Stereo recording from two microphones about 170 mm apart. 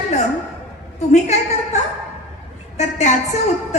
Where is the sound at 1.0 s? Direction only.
40° left (ahead or behind).